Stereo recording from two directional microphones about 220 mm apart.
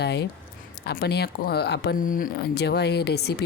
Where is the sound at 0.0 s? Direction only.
50° left (ahead or behind).